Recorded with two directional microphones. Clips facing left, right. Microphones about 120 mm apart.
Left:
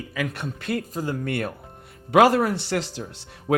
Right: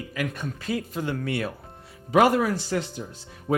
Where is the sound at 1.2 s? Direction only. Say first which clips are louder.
Left 1 dB; 55° left (ahead or behind).